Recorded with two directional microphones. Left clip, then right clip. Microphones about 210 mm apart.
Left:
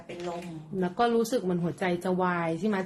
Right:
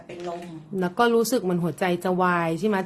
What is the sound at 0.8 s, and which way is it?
Speech, 25° right (ahead or behind).